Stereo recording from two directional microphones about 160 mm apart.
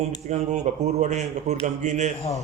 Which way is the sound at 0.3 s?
45° right (ahead or behind).